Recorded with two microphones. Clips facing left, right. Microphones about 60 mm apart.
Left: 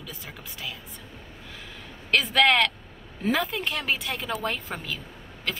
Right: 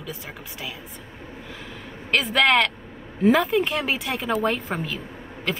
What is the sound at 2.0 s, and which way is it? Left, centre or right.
A woman's voice, centre.